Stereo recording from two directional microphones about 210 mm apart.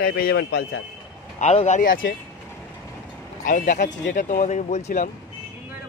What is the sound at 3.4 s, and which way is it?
Speech, 40° left (ahead or behind).